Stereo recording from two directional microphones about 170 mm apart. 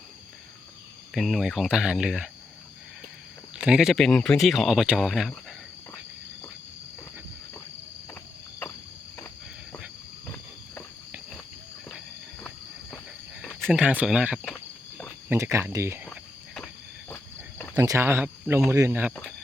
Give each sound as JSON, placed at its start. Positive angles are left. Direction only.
{"t": 1.1, "sound": "speech", "side_deg": 0}
{"t": 3.6, "sound": "speech", "side_deg": -5}
{"t": 8.1, "sound": "cricket", "side_deg": 15}
{"t": 12.4, "sound": "walk", "side_deg": 5}
{"t": 13.7, "sound": "speech", "side_deg": -5}
{"t": 14.4, "sound": "cricket", "side_deg": 10}
{"t": 15.3, "sound": "speech", "side_deg": -15}
{"t": 17.7, "sound": "speech", "side_deg": -15}